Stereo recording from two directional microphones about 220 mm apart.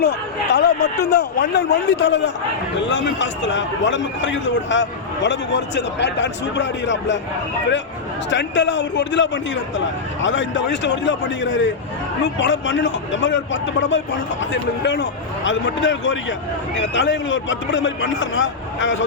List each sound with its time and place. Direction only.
0.0 s a man's voice: 50° left (ahead or behind)
8.3 s a man's voice: 55° left (ahead or behind)